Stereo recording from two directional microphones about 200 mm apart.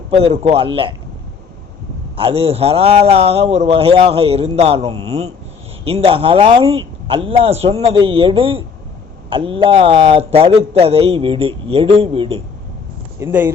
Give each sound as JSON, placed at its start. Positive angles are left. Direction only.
{"t": 0.2, "sound": "a man's voice", "side_deg": -30}
{"t": 2.1, "sound": "a man's voice", "side_deg": -30}
{"t": 13.1, "sound": "speech", "side_deg": -10}